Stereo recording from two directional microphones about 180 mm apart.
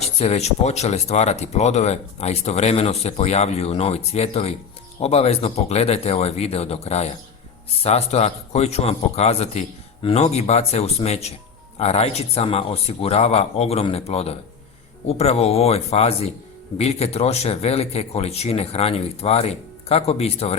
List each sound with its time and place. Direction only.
0.2 s speech: 35° left (ahead or behind)